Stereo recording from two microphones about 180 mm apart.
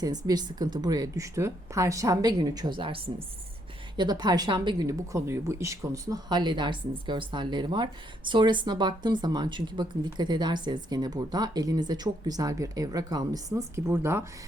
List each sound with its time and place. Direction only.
0.3 s speech: 20° right (ahead or behind)